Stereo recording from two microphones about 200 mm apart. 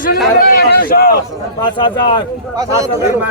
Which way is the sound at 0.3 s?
45° left (ahead or behind).